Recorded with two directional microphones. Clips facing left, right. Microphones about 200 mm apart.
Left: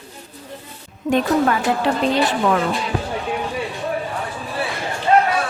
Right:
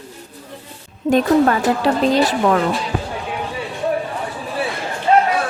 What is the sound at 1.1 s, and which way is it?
Speech, 30° right (ahead or behind).